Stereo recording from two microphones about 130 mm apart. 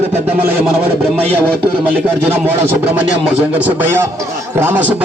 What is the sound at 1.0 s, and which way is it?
Speech, 15° right (ahead or behind).